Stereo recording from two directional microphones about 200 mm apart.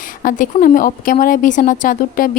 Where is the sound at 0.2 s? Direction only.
45° left (ahead or behind).